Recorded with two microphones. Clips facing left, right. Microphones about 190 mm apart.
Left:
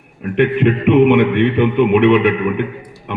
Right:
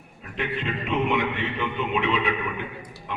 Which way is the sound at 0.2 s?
65° left (ahead or behind).